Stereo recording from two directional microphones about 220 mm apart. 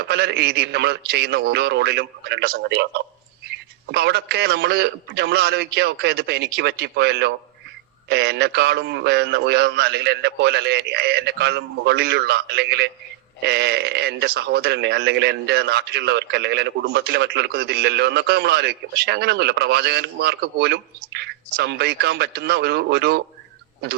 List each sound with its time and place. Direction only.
0.0 s speech: 50° right (ahead or behind)